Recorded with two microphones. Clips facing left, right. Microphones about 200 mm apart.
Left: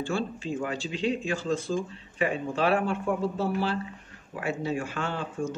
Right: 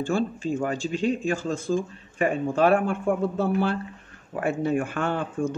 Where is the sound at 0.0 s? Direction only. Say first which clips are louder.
Right 5 dB; 45° right (ahead or behind).